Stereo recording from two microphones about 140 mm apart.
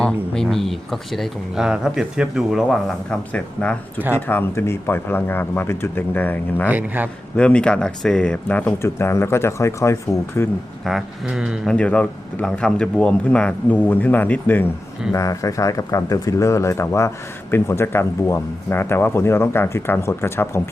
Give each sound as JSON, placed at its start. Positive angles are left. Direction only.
{"t": 0.0, "sound": "speech", "side_deg": 5}
{"t": 6.7, "sound": "speech", "side_deg": -10}
{"t": 7.3, "sound": "speech", "side_deg": 5}
{"t": 10.8, "sound": "speech", "side_deg": -5}
{"t": 11.7, "sound": "speech", "side_deg": 10}